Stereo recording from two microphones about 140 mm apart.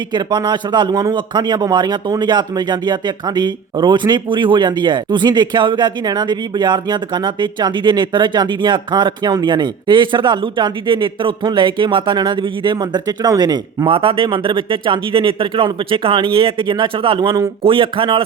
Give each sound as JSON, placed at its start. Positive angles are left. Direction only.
{"t": 0.1, "sound": "a man's voice", "side_deg": -30}
{"t": 17.6, "sound": "a man's voice", "side_deg": -40}